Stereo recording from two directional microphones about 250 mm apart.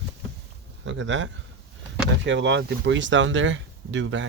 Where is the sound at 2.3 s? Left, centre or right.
Right.